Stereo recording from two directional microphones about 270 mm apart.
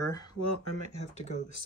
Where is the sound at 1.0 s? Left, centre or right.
Left.